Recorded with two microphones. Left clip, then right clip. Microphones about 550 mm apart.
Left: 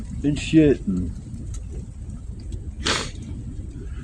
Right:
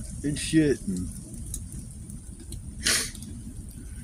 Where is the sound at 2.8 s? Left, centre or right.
Right.